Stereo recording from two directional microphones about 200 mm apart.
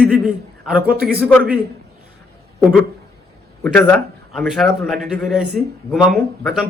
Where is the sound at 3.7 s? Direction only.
5° left (ahead or behind).